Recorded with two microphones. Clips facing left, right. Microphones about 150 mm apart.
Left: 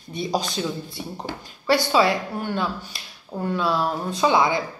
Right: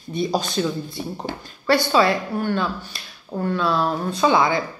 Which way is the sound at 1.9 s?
15° left (ahead or behind).